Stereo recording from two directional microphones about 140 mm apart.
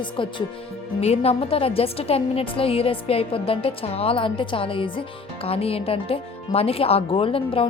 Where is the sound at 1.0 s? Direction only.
45° left (ahead or behind).